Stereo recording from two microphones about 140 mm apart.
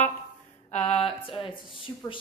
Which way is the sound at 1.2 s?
40° left (ahead or behind).